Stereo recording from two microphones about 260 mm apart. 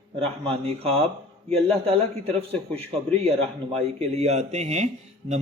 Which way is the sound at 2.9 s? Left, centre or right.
Right.